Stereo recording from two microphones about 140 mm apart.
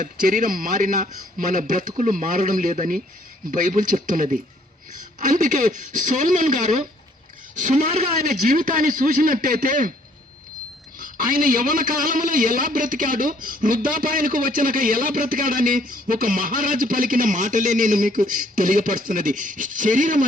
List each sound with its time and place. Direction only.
0.0 s a man's voice: 75° right (ahead or behind)
8.4 s a man's voice: 75° right (ahead or behind)
11.0 s a man's voice: 85° right; by 20.2 s 70° right (ahead or behind)